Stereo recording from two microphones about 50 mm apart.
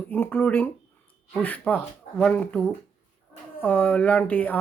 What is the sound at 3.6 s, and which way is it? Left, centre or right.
Speech, left.